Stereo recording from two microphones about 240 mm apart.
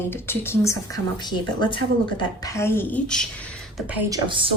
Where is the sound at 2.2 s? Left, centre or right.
Centre.